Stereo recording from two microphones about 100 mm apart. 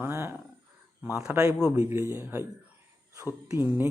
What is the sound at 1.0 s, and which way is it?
Speech, 10° right (ahead or behind).